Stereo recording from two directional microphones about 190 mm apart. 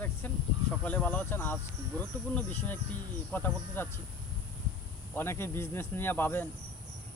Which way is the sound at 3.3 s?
10° left (ahead or behind).